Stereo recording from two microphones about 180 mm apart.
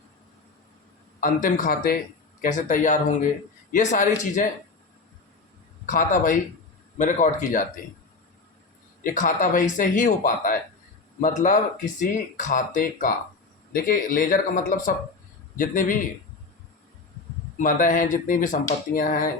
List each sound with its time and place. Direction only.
1.2 s speech: 50° left (ahead or behind)
2.4 s speech: 45° left (ahead or behind)
5.8 s speech: 50° left (ahead or behind)
9.0 s speech: 45° left (ahead or behind)
17.6 s speech: 45° left (ahead or behind)